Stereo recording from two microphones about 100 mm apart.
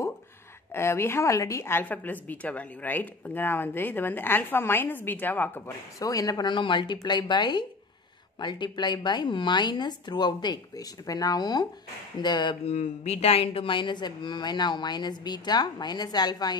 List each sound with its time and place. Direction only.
0.7 s a woman's voice: 25° left (ahead or behind)
5.9 s speech: 35° left (ahead or behind)
12.6 s speech: 90° left; by 16.5 s 45° left (ahead or behind)